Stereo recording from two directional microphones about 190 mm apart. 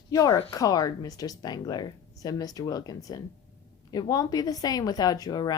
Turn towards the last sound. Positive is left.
turn(degrees=20)  # may be behind; listen again after turning